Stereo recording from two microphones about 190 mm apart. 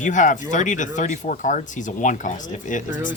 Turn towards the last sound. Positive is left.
turn(degrees=40)  # may be behind; listen again after turning